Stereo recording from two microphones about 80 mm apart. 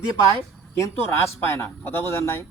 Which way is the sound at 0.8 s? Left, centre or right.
Left.